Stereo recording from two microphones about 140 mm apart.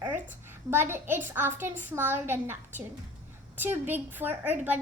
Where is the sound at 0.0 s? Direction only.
15° right (ahead or behind).